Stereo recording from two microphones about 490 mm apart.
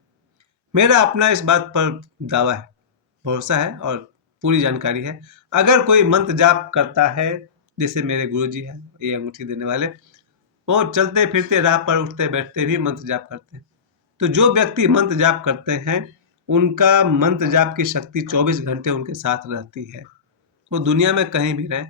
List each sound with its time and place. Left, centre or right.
0.3 s speech: right